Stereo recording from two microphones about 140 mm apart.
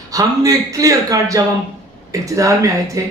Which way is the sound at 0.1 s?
25° right (ahead or behind).